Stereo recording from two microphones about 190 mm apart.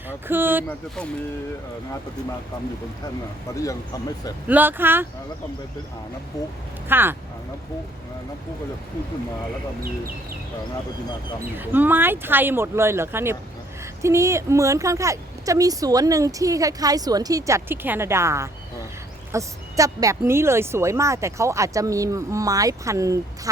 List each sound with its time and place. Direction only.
0.3 s speech: 10° right (ahead or behind)
3.5 s speech: 15° left (ahead or behind)
4.4 s speech: 10° right (ahead or behind)
6.8 s speech: 10° right (ahead or behind)
11.5 s speech: 10° right (ahead or behind)